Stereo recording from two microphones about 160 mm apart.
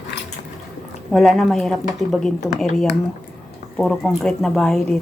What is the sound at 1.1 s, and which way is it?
Speech, centre (ahead or behind).